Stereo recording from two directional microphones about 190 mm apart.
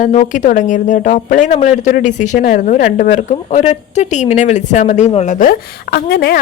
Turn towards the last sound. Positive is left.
turn(degrees=55)  # may be behind; listen again after turning